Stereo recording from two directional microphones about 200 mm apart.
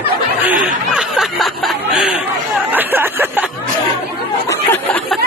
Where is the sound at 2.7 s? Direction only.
10° right (ahead or behind).